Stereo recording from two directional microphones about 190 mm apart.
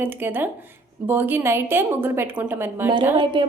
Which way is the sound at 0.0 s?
10° right (ahead or behind).